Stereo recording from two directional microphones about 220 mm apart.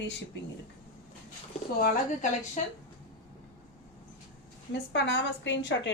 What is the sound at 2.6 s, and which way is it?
Speech, 30° left (ahead or behind).